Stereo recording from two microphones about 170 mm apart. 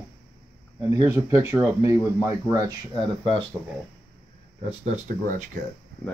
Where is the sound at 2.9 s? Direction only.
35° left (ahead or behind).